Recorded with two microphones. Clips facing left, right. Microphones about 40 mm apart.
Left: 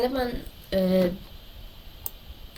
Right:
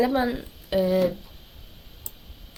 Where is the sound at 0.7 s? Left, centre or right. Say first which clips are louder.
Right 1 dB; centre.